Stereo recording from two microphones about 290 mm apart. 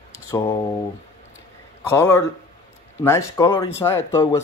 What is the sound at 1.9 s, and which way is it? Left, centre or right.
Speech, centre.